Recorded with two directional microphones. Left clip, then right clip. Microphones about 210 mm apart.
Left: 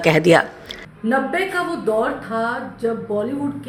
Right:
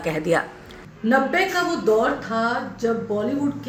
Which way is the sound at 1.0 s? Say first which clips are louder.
Right 1 dB; 5° left (ahead or behind).